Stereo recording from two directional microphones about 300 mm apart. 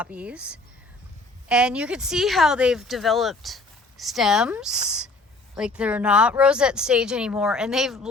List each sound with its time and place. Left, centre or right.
0.0 s speech: centre